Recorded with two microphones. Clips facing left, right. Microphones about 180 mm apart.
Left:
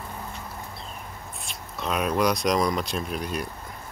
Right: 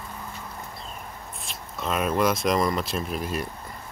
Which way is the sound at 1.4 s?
Centre (ahead or behind).